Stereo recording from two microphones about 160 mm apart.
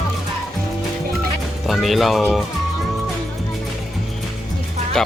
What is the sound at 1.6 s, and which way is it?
Speech, centre (ahead or behind).